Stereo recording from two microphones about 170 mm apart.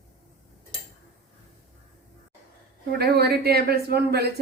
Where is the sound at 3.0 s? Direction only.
70° right (ahead or behind).